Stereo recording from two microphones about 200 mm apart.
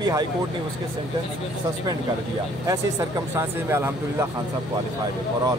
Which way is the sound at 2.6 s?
15° right (ahead or behind).